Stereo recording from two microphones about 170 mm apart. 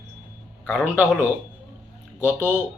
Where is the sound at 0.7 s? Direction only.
5° right (ahead or behind).